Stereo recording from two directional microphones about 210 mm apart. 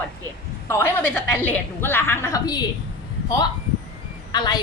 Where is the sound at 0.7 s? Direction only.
10° left (ahead or behind).